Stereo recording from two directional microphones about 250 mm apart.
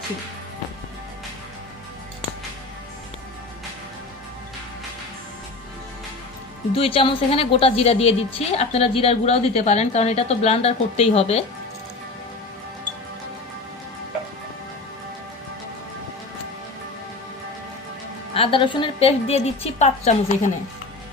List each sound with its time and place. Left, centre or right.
6.7 s a woman's voice: left
18.3 s a woman's voice: centre